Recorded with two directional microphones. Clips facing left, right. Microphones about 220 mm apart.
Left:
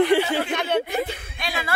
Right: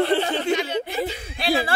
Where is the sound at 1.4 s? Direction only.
30° right (ahead or behind).